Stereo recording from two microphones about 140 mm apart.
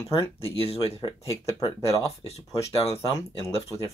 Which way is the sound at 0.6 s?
45° left (ahead or behind).